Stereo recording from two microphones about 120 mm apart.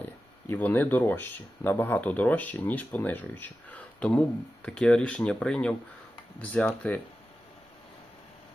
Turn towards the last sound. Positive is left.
turn(degrees=15)  # may be behind; listen again after turning